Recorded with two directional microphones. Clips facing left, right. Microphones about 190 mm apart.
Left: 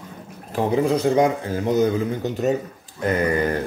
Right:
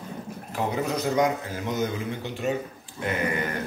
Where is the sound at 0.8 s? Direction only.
30° left (ahead or behind).